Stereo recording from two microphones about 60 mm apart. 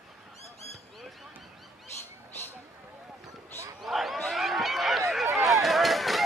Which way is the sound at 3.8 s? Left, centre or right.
Centre.